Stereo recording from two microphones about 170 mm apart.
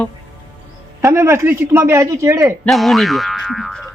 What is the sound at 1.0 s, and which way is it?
Speech, 15° right (ahead or behind).